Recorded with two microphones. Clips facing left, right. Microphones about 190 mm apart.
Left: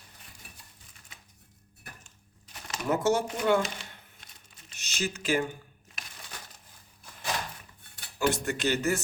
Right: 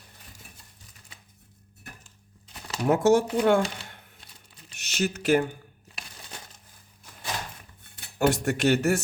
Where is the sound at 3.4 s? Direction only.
50° right (ahead or behind).